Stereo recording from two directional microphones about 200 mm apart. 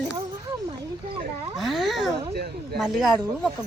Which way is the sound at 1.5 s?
Centre (ahead or behind).